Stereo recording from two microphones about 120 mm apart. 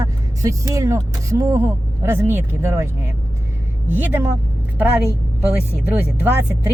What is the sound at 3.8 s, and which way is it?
Speech, 15° right (ahead or behind).